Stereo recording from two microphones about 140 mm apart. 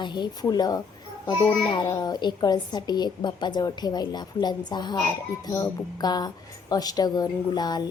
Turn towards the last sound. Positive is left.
turn(degrees=30)  # may be behind; listen again after turning